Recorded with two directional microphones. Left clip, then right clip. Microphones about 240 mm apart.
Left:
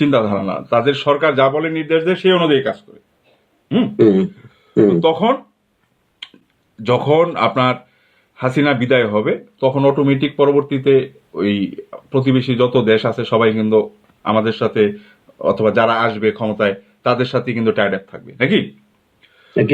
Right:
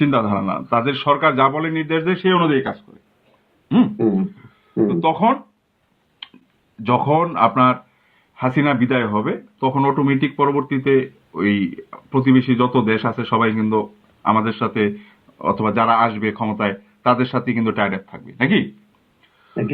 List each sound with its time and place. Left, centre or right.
0.0 s a man's voice: centre
3.9 s a sound: left
4.9 s a man's voice: centre
6.8 s a man's voice: centre